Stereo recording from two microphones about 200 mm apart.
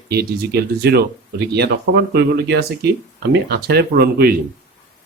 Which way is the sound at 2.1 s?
55° right (ahead or behind).